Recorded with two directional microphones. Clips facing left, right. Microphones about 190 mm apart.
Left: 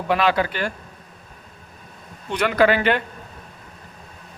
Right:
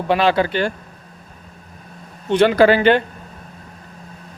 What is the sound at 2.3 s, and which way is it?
Speech, 25° right (ahead or behind).